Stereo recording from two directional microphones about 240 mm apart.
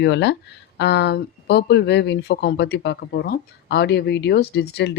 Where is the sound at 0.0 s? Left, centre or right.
Left.